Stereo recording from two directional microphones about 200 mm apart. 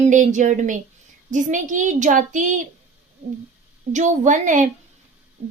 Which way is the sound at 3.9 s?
35° right (ahead or behind).